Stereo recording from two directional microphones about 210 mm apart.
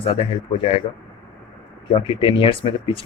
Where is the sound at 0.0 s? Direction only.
25° left (ahead or behind).